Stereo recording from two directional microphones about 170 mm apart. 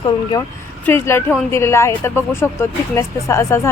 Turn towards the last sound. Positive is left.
turn(degrees=15)  # may be behind; listen again after turning